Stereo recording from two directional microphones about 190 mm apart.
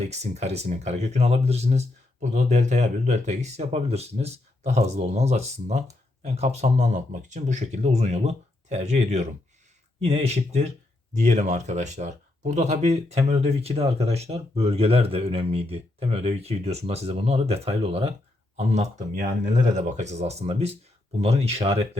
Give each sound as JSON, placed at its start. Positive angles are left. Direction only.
{"t": 0.0, "sound": "speech", "side_deg": -35}